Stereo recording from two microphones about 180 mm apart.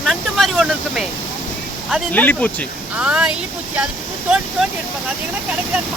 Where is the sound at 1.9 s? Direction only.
10° left (ahead or behind).